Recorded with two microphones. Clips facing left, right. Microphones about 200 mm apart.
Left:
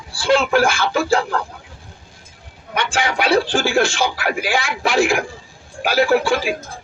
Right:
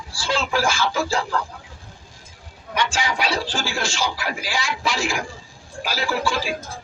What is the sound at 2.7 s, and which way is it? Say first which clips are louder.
Speech: left 3 dB; 60° left (ahead or behind).